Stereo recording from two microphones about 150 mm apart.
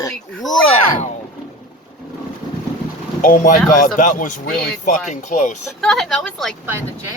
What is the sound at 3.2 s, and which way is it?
Speech, 60° left (ahead or behind).